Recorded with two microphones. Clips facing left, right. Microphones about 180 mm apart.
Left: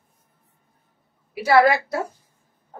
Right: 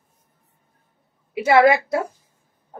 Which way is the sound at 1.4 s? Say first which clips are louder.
Right 2 dB; 25° right (ahead or behind).